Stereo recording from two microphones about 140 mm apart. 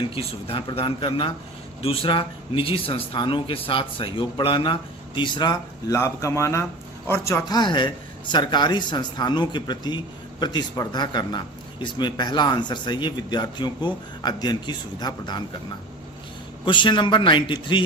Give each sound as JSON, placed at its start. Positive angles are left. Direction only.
{"t": 0.1, "sound": "speech", "side_deg": 45}
{"t": 6.0, "sound": "a man's voice", "side_deg": 20}
{"t": 16.6, "sound": "speech", "side_deg": 35}